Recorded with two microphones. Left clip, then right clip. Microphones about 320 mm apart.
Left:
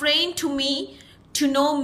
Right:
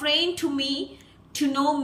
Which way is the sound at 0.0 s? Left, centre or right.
Centre.